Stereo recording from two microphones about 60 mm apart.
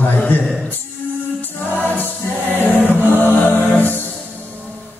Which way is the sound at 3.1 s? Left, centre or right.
Left.